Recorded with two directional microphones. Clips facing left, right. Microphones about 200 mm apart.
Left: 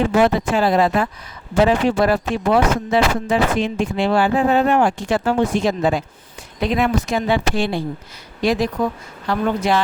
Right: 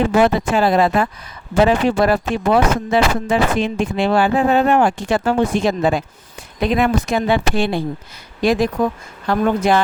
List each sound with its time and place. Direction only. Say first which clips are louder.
0.2 s speech: right 1 dB; 55° right (ahead or behind)